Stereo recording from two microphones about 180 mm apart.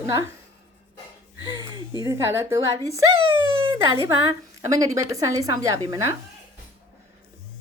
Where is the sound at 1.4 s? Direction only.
20° right (ahead or behind).